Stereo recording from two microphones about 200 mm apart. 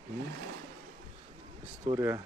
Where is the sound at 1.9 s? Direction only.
15° right (ahead or behind).